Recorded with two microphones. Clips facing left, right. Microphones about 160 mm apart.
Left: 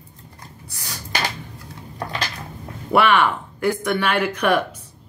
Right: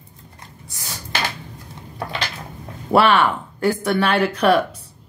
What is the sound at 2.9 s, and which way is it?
Speech, 35° right (ahead or behind).